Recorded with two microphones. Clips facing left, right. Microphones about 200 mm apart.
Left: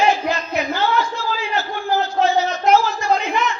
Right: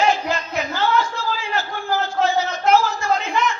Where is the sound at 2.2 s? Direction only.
15° left (ahead or behind).